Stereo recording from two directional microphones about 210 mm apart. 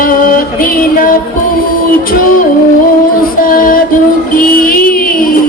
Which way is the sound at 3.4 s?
40° left (ahead or behind).